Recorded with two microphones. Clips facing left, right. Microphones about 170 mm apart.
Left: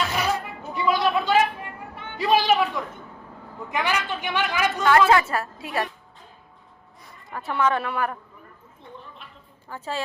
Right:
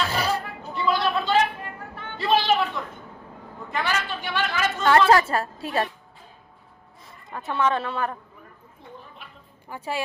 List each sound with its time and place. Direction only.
0.1 s music: 30° right (ahead or behind)
0.6 s a sound: 15° left (ahead or behind)
5.0 s a woman's voice: 30° right (ahead or behind)
7.0 s a man's voice: 20° right (ahead or behind)
9.6 s a woman's voice: 15° right (ahead or behind)